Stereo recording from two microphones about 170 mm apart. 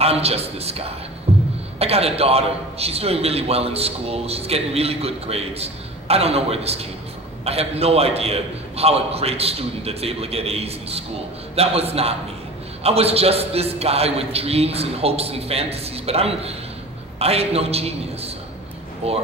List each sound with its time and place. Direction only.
0.0 s a man's voice: 35° right (ahead or behind)
1.3 s beatboxing: 35° right (ahead or behind)
1.8 s a man's voice: 35° right (ahead or behind)